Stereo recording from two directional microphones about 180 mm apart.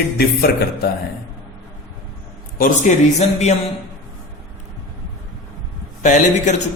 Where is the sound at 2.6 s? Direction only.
40° left (ahead or behind).